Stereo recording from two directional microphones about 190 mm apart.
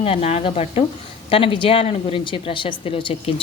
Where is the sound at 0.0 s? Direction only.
30° left (ahead or behind).